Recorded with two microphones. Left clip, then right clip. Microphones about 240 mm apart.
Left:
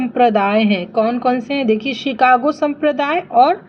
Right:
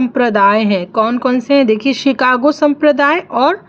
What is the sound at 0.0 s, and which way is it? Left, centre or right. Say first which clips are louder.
A woman's voice: right 3 dB; right.